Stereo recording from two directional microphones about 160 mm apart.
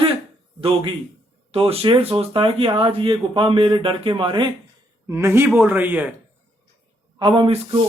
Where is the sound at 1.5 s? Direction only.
35° right (ahead or behind).